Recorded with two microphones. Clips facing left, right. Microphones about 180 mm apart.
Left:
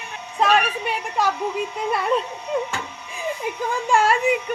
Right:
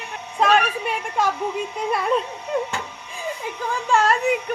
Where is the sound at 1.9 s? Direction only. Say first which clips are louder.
Right 1 dB; centre (ahead or behind).